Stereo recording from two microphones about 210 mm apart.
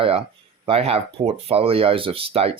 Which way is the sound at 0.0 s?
25° right (ahead or behind).